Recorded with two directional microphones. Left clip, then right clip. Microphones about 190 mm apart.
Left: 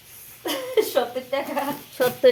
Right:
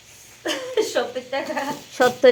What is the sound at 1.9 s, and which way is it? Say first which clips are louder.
Speech: right 4 dB; 15° right (ahead or behind).